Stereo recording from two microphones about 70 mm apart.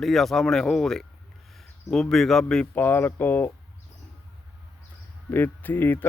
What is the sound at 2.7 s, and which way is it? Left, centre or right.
Speech, left.